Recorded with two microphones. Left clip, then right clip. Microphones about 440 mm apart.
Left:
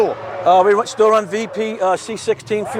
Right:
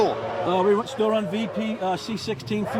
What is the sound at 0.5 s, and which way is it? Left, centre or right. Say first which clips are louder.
Speech: left 10 dB; left.